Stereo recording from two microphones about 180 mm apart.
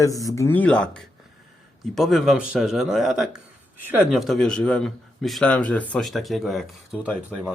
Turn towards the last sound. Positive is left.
turn(degrees=0)  # may be behind; listen again after turning